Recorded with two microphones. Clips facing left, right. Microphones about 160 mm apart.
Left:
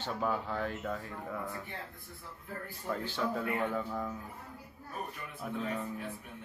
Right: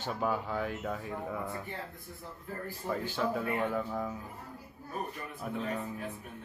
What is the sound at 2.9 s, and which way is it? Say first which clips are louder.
A child's voice: right 2 dB; 5° right (ahead or behind).